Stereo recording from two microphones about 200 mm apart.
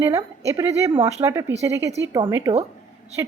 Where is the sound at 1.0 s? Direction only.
35° right (ahead or behind).